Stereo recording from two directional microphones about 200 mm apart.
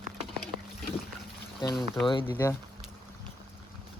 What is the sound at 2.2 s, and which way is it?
Speech, 10° left (ahead or behind).